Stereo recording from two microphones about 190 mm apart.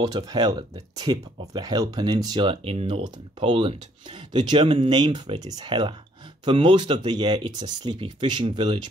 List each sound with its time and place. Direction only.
0.0 s speech: 20° right (ahead or behind)